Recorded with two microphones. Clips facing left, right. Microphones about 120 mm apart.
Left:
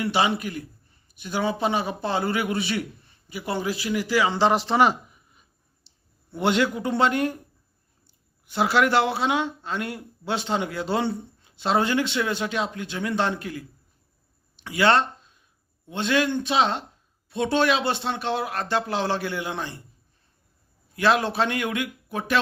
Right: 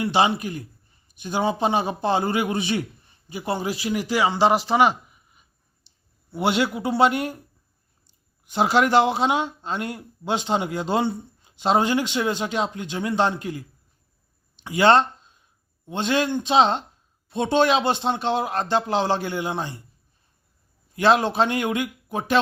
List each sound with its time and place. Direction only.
0.3 s speech: 25° right (ahead or behind)
4.3 s a man's voice: 10° right (ahead or behind)
8.4 s speech: 20° right (ahead or behind)
20.9 s speech: 25° right (ahead or behind)